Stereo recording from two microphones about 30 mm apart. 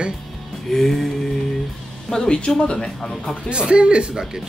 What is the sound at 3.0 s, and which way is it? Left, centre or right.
Speech, centre.